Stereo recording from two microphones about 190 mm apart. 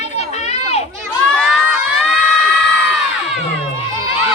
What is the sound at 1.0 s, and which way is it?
Crowd, 5° left (ahead or behind).